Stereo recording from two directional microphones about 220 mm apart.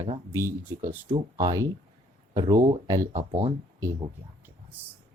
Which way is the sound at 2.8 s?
15° right (ahead or behind).